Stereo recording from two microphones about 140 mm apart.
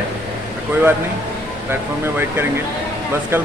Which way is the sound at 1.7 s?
15° right (ahead or behind).